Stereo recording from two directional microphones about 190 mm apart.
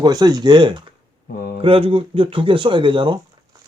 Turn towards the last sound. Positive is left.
turn(degrees=-25)  # may be behind; listen again after turning